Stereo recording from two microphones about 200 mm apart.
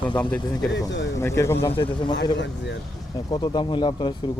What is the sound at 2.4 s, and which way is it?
Speech, 60° left (ahead or behind).